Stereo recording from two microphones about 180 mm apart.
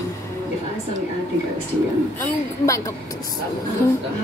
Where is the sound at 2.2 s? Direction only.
15° left (ahead or behind).